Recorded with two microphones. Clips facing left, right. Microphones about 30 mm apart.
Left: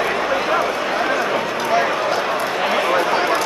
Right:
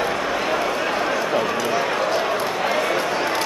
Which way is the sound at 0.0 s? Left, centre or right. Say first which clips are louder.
Left 3 dB; centre.